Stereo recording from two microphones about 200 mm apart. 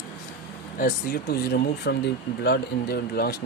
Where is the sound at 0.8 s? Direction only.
45° left (ahead or behind).